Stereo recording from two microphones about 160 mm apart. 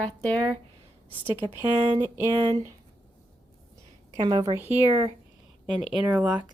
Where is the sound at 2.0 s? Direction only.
15° right (ahead or behind).